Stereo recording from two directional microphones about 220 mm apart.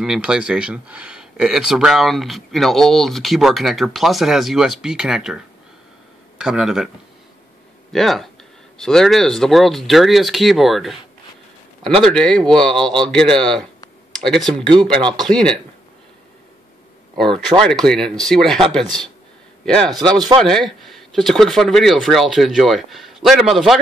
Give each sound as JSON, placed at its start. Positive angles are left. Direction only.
{"t": 0.0, "sound": "speech", "side_deg": -5}
{"t": 7.9, "sound": "speech", "side_deg": 0}
{"t": 12.0, "sound": "speech", "side_deg": 5}
{"t": 17.2, "sound": "a man's voice", "side_deg": 0}
{"t": 19.9, "sound": "speech", "side_deg": -20}
{"t": 20.4, "sound": "speech", "side_deg": 0}